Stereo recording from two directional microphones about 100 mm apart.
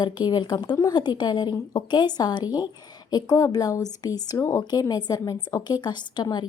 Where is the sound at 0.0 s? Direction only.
50° left (ahead or behind); by 4.6 s 30° left (ahead or behind).